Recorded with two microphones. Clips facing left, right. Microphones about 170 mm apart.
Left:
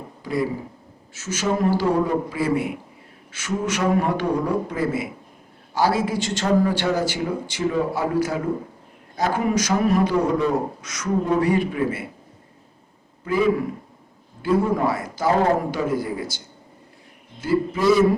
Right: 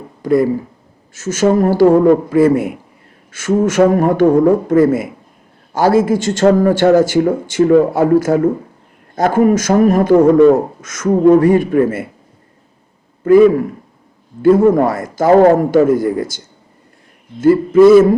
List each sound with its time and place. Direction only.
0.2 s a sound: 50° right (ahead or behind)
1.1 s a man's voice: 45° right (ahead or behind)
13.2 s a man's voice: 50° right (ahead or behind)
17.4 s a man's voice: 50° right (ahead or behind)